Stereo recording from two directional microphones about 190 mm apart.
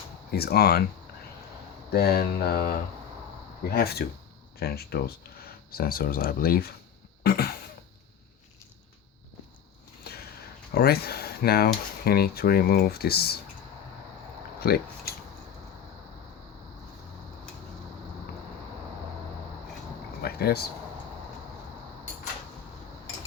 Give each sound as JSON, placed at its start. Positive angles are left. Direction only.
{"t": 0.3, "sound": "speech", "side_deg": 55}
{"t": 1.9, "sound": "speech", "side_deg": 55}
{"t": 7.2, "sound": "a sound", "side_deg": 55}
{"t": 10.8, "sound": "speech", "side_deg": 55}
{"t": 14.6, "sound": "speech", "side_deg": 55}
{"t": 20.2, "sound": "speech", "side_deg": 55}